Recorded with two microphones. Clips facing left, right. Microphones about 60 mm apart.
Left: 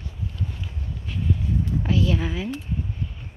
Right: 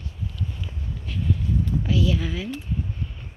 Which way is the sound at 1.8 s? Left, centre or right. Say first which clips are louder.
Left 2 dB; left.